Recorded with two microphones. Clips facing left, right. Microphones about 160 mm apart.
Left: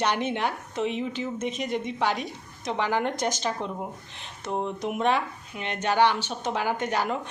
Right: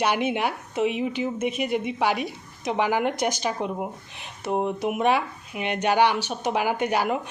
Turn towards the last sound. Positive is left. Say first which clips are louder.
# right 3 dB
turn(degrees=-10)  # may be behind; listen again after turning